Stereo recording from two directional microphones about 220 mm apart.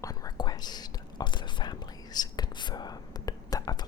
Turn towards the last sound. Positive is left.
turn(degrees=15)  # may be behind; listen again after turning